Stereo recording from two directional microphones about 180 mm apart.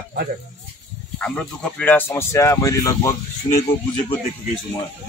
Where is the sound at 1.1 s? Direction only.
5° left (ahead or behind).